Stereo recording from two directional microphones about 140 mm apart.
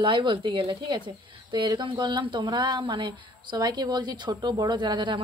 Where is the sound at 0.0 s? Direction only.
35° right (ahead or behind).